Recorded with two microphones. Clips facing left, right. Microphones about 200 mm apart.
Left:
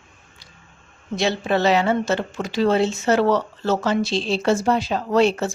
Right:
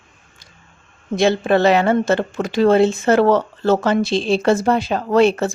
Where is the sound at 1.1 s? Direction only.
55° right (ahead or behind).